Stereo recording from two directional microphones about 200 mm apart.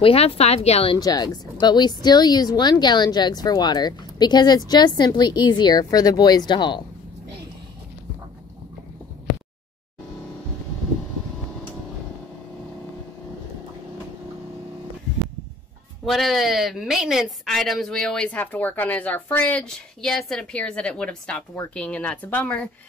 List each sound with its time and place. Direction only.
0.0 s speech: 30° left (ahead or behind)
0.9 s speech: 20° left (ahead or behind)
16.1 s a woman's voice: centre (ahead or behind)